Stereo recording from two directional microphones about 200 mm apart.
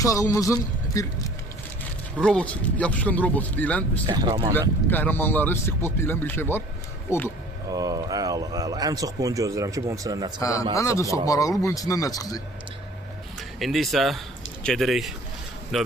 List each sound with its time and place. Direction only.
0.0 s speech: 15° left (ahead or behind)
2.2 s speech: 5° left (ahead or behind)
4.0 s speech: 20° right (ahead or behind)
4.9 s speech: 10° left (ahead or behind)
7.3 s speech: 20° right (ahead or behind)
10.4 s speech: 15° left (ahead or behind)
13.6 s speech: centre (ahead or behind)